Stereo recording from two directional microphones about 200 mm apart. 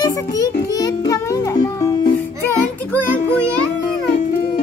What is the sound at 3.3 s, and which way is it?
Music, 5° left (ahead or behind).